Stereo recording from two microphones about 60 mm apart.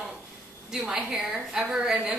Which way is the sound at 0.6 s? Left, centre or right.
Centre.